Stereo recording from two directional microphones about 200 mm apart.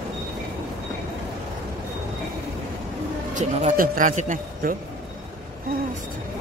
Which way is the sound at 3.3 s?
35° right (ahead or behind).